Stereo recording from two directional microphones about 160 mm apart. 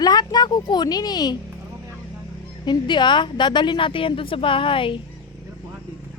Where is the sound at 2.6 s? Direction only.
30° left (ahead or behind).